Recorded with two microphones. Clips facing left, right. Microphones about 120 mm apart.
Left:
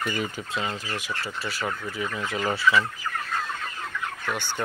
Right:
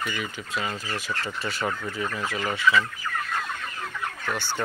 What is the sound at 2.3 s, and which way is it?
Speech, 30° left (ahead or behind).